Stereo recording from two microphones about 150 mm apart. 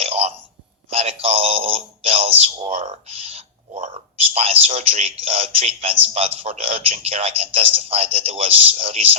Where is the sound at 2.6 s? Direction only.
50° right (ahead or behind).